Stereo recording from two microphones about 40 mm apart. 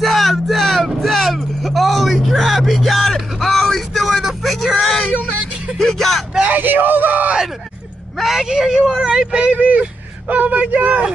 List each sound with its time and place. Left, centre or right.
0.0 s vehicle: centre
3.7 s a sound: centre
5.8 s vehicle: centre
6.5 s a sound: right
8.2 s speech: centre
8.5 s speech: centre
9.7 s speech: right